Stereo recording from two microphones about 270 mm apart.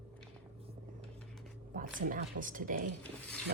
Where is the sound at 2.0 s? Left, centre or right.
Right.